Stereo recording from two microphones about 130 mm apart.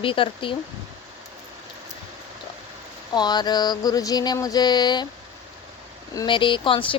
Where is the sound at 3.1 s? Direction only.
35° left (ahead or behind).